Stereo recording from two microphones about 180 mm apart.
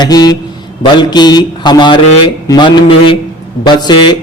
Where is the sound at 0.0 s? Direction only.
20° left (ahead or behind).